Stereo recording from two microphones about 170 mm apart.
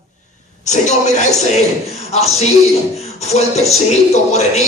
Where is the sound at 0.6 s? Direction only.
45° left (ahead or behind).